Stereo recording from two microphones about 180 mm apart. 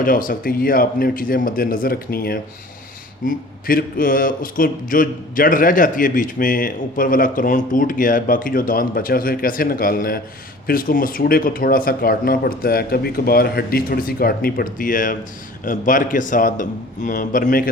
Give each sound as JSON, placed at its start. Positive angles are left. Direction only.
{"t": 0.0, "sound": "a man's voice", "side_deg": 50}